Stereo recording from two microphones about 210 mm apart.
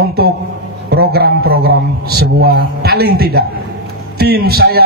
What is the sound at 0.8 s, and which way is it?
A man's voice, 50° right (ahead or behind).